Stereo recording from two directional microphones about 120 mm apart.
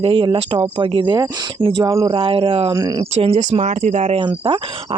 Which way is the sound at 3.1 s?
55° right (ahead or behind).